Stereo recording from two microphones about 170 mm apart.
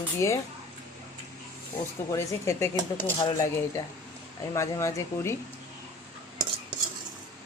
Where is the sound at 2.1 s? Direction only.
15° left (ahead or behind).